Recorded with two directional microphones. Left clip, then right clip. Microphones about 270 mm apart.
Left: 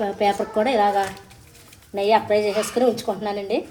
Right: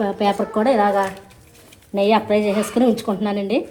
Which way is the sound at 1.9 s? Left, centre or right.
Right.